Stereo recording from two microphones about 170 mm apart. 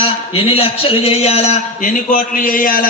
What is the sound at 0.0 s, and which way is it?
A man's voice, 35° left (ahead or behind).